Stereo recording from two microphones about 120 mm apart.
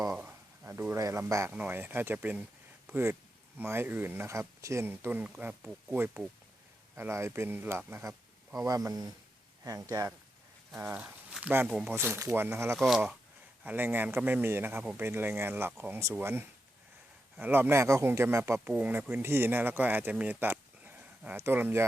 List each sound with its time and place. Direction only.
0.3 s a sound: 20° right (ahead or behind)
1.2 s speech: 20° right (ahead or behind)
8.6 s speech: 30° right (ahead or behind)
10.8 s speech: 15° right (ahead or behind)
11.9 s speech: 20° right (ahead or behind)
18.7 s speech: 15° right (ahead or behind)